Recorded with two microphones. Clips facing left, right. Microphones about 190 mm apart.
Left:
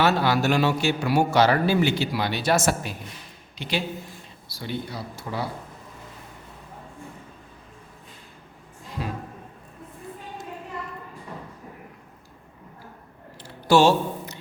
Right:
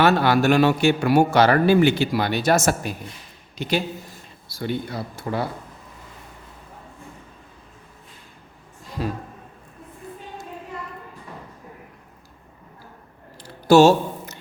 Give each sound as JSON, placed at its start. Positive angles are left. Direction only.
{"t": 0.0, "sound": "a man's voice", "side_deg": -55}
{"t": 9.0, "sound": "speech", "side_deg": -40}
{"t": 13.7, "sound": "speech", "side_deg": -45}